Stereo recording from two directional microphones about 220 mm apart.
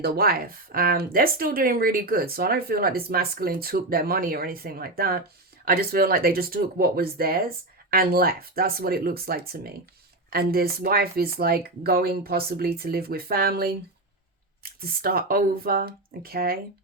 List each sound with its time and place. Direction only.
0.0 s speech: 45° right (ahead or behind)